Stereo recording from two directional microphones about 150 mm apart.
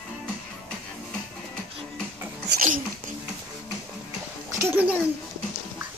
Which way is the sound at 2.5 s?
60° right (ahead or behind).